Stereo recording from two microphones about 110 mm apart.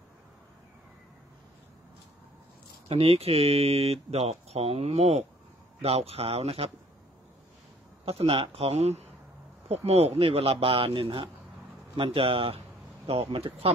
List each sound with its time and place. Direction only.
2.9 s speech: 65° right (ahead or behind)
8.0 s speech: 60° right (ahead or behind)